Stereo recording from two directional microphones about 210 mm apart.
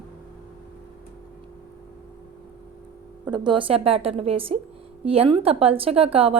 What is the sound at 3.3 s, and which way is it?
A woman's voice, 20° right (ahead or behind).